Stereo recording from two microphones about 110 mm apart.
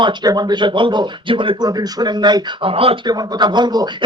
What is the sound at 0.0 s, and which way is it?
Speech, 45° right (ahead or behind).